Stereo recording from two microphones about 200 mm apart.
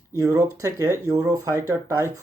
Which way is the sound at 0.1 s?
15° right (ahead or behind).